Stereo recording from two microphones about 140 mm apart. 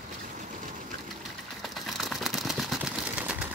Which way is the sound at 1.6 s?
Centre (ahead or behind).